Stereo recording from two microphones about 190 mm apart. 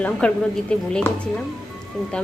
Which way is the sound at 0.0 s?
5° left (ahead or behind).